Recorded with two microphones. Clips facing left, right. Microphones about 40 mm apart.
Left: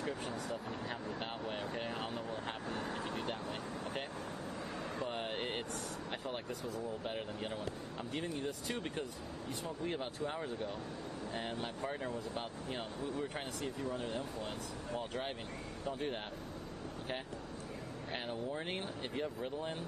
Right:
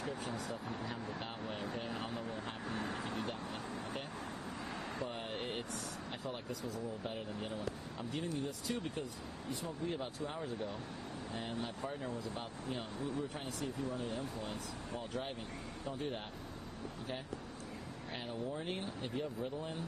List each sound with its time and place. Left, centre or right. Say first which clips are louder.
1.5 s speech: even; left
3.0 s vehicle: even; centre
5.1 s a sound: left 2 dB; left
6.2 s speech: right 2 dB; left
8.1 s speech: even; left
9.5 s speech: even; left
11.3 s speech: even; left
13.8 s speech: left 1 dB; left
18.1 s speech: left 1 dB; left